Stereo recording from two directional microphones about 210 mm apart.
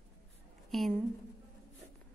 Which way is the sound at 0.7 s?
Centre (ahead or behind).